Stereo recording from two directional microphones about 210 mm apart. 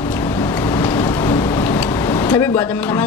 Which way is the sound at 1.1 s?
15° left (ahead or behind).